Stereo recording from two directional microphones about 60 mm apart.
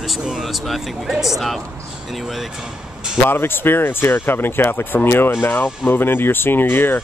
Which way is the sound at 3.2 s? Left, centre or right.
Left.